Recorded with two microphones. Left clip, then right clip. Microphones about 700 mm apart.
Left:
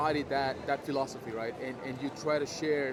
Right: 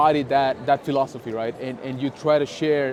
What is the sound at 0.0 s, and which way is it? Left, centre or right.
A man's voice, right.